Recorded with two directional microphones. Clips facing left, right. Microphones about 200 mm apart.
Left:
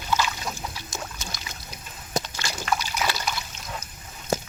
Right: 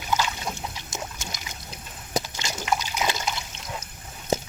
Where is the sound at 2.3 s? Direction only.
20° right (ahead or behind).